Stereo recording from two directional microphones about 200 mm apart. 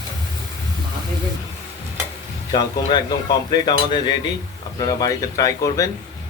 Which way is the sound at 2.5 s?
20° left (ahead or behind).